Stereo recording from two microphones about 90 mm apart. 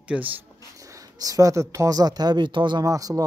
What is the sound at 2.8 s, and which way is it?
Speech, 40° right (ahead or behind).